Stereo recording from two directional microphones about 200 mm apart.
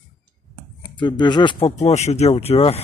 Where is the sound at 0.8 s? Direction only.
20° left (ahead or behind).